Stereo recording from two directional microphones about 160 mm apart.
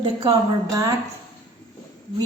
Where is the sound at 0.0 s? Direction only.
35° right (ahead or behind).